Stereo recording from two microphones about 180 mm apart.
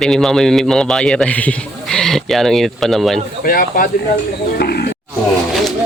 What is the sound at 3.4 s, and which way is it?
Speech, 50° left (ahead or behind).